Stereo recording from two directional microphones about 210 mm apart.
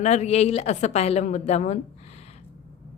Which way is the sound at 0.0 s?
30° left (ahead or behind).